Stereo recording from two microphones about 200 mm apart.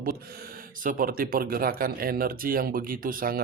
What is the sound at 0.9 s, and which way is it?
Mantra, 45° right (ahead or behind).